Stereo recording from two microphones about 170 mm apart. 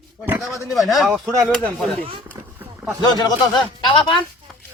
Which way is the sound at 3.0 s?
25° left (ahead or behind).